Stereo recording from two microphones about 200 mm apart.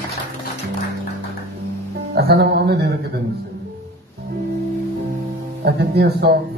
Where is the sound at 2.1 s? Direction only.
55° right (ahead or behind).